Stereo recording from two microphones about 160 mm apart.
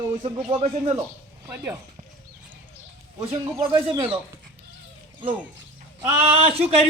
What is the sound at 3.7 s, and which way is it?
Speech, 35° right (ahead or behind).